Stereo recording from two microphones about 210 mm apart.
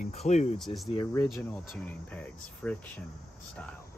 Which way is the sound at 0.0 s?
30° left (ahead or behind).